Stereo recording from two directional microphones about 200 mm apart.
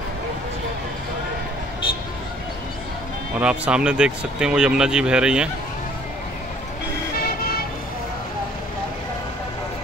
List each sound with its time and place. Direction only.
3.3 s speech: 5° right (ahead or behind)
7.2 s vehicle: 50° left (ahead or behind)